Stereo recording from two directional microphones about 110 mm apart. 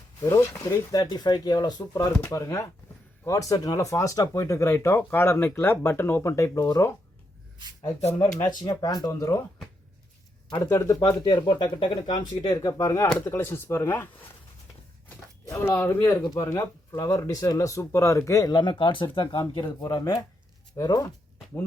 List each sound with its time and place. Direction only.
0.2 s speech: 25° left (ahead or behind)
8.4 s speech: 40° left (ahead or behind)
10.5 s speech: 30° left (ahead or behind)
11.2 s speech: 40° left (ahead or behind); by 14.1 s 20° left (ahead or behind)
15.4 s speech: 25° left (ahead or behind); by 19.9 s 45° left (ahead or behind)
20.7 s speech: 35° left (ahead or behind)